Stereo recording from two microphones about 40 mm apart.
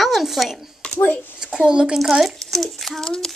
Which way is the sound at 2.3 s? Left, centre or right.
Centre.